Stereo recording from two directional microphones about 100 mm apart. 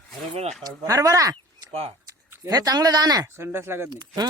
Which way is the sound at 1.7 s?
90° right.